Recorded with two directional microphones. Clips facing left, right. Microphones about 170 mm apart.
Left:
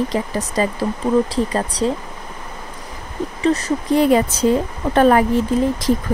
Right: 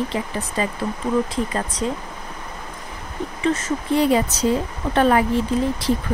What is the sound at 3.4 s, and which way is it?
Speech, 35° left (ahead or behind).